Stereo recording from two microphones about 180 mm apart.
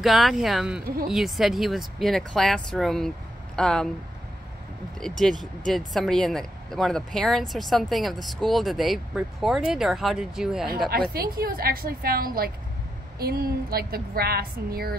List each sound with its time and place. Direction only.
0.0 s speech: centre (ahead or behind)
5.2 s speech: centre (ahead or behind)
10.9 s a woman's voice: 55° right (ahead or behind)